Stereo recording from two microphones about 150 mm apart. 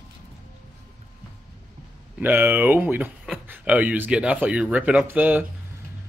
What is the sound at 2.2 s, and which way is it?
Speech, 15° right (ahead or behind).